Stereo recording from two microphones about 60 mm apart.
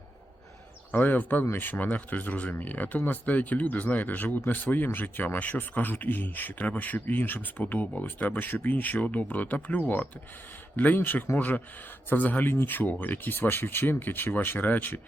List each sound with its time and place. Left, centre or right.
0.9 s speech: left